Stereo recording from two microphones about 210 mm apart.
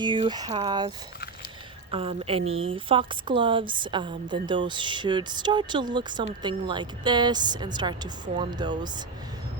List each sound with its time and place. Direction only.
0.0 s speech: 20° right (ahead or behind)